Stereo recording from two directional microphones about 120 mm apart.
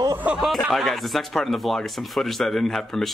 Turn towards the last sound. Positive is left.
turn(degrees=5)  # may be behind; listen again after turning